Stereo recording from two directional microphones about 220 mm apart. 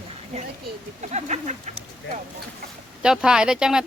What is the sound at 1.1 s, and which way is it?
Speech, 30° right (ahead or behind).